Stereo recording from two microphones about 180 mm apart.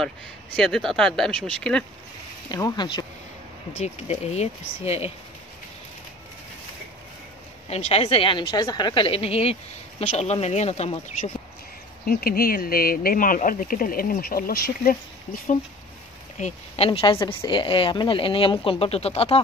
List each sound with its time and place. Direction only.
0.6 s speech: 5° left (ahead or behind)
2.5 s speech: 20° left (ahead or behind)
3.7 s a woman's voice: 35° left (ahead or behind)
7.7 s a woman's voice: 35° left (ahead or behind)
12.1 s speech: 55° left (ahead or behind)
16.3 s a woman's voice: 40° left (ahead or behind)